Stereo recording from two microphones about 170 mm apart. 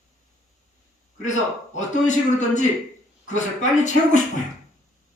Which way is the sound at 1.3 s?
45° left (ahead or behind).